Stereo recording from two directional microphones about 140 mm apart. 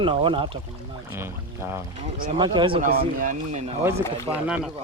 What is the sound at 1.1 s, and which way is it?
Speech, 20° right (ahead or behind).